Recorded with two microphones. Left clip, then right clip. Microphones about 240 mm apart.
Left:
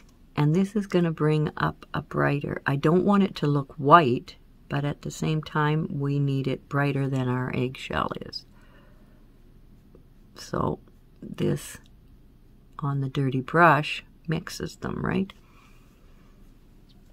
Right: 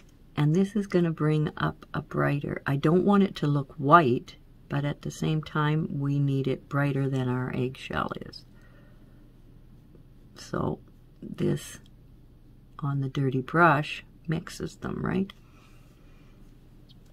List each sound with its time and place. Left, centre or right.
0.3 s speech: centre
10.3 s speech: centre